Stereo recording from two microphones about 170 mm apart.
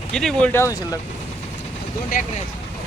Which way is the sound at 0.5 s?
20° left (ahead or behind).